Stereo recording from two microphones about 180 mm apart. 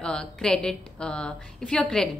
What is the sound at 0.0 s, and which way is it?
A woman's voice, 5° left (ahead or behind).